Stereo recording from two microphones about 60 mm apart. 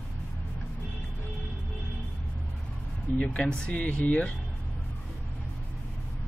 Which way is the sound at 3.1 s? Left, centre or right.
Left.